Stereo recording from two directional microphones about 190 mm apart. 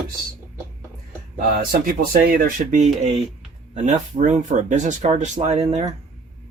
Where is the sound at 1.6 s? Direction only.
50° right (ahead or behind); by 5.8 s 35° right (ahead or behind).